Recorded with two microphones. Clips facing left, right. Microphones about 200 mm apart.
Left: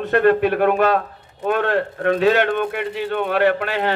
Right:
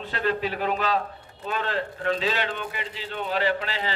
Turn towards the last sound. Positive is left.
turn(degrees=60)  # may be behind; listen again after turning